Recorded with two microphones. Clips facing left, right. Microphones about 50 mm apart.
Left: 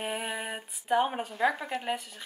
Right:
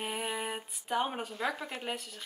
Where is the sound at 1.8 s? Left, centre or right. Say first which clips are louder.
Left 5 dB; centre.